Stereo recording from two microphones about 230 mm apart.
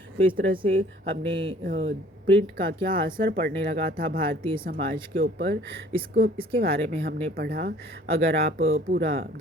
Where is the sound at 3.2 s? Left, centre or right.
Right.